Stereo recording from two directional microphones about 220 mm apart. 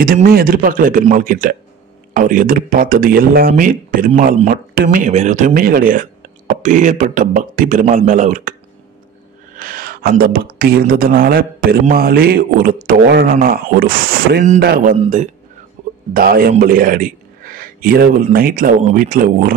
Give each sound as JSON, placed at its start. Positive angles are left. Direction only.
{"t": 0.0, "sound": "speech", "side_deg": -40}
{"t": 9.6, "sound": "speech", "side_deg": -40}